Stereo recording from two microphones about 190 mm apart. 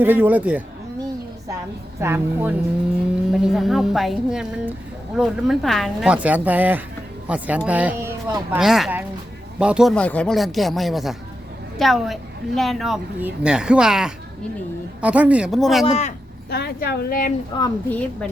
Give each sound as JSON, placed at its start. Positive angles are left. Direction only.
{"t": 0.0, "sound": "speech", "side_deg": -10}
{"t": 2.0, "sound": "a woman's voice", "side_deg": -10}
{"t": 15.9, "sound": "speech", "side_deg": 35}
{"t": 16.5, "sound": "a woman's voice", "side_deg": 55}
{"t": 17.5, "sound": "a woman's voice", "side_deg": 25}
{"t": 17.8, "sound": "a woman's voice", "side_deg": 5}